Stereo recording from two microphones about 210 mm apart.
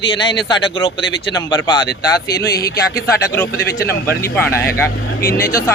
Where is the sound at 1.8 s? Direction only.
50° left (ahead or behind).